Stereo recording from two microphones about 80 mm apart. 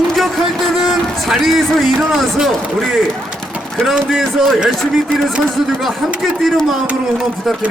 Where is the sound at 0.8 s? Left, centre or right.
Centre.